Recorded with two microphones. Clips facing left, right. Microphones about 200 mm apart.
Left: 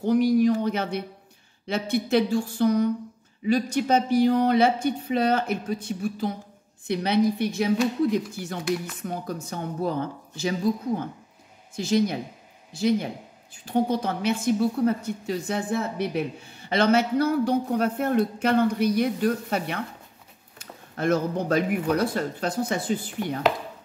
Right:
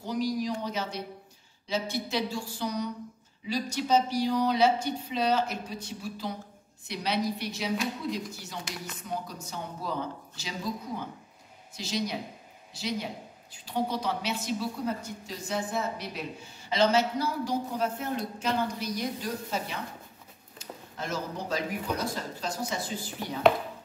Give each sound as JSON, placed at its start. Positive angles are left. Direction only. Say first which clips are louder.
{"t": 0.0, "sound": "a woman's voice", "louder": "left 10 dB", "side_deg": 55}